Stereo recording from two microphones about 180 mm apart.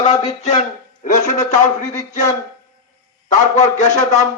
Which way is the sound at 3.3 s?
40° left (ahead or behind).